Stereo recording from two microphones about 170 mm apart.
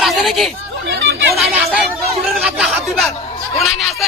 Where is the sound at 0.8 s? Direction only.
85° right.